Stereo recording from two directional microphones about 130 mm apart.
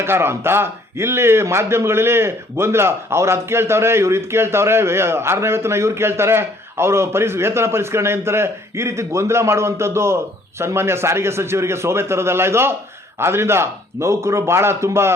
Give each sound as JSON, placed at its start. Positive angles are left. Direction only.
{"t": 0.0, "sound": "speech", "side_deg": -20}